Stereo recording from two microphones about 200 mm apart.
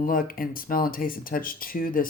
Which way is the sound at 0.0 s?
45° left (ahead or behind).